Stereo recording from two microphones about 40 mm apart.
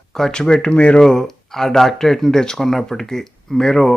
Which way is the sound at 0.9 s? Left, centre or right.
Centre.